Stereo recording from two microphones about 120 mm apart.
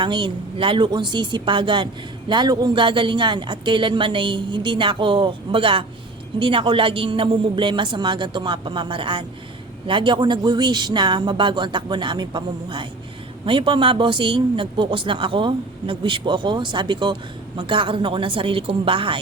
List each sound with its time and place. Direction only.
0.0 s a woman's voice: 40° right (ahead or behind)